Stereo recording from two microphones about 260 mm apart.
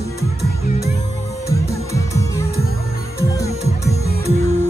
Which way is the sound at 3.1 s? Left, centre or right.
Centre.